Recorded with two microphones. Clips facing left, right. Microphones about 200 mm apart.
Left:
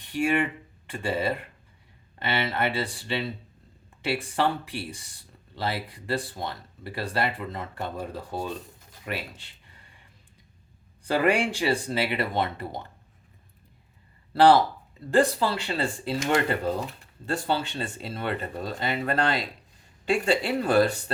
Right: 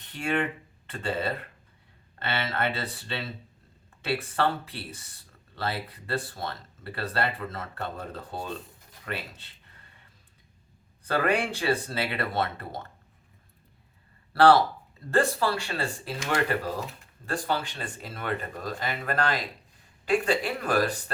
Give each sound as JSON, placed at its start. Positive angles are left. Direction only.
{"t": 0.0, "sound": "speech", "side_deg": 10}
{"t": 11.0, "sound": "speech", "side_deg": 15}
{"t": 15.1, "sound": "speech", "side_deg": 15}
{"t": 17.2, "sound": "speech", "side_deg": 25}